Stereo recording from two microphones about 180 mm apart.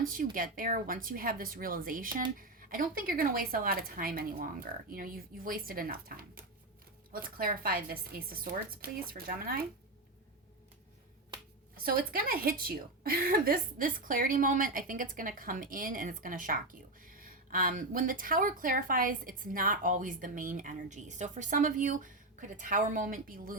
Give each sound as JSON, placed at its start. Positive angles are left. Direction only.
{"t": 0.0, "sound": "speech", "side_deg": -50}
{"t": 11.8, "sound": "speech", "side_deg": -55}